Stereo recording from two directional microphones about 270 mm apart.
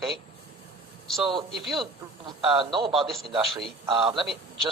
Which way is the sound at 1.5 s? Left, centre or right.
Centre.